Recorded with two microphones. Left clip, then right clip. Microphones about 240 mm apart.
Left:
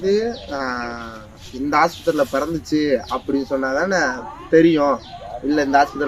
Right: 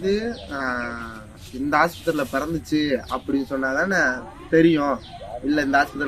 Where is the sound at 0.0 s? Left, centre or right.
Centre.